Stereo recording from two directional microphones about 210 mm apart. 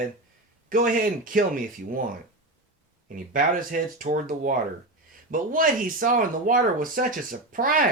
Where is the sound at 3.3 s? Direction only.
40° right (ahead or behind).